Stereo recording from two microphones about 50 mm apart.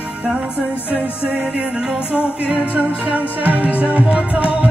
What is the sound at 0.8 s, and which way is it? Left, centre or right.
Music, right.